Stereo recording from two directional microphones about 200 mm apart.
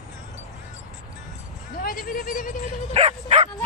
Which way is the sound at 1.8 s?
45° left (ahead or behind).